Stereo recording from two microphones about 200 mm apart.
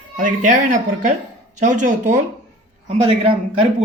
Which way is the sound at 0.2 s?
40° right (ahead or behind).